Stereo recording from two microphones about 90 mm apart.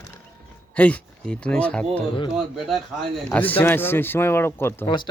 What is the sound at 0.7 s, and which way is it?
Speech, 15° left (ahead or behind).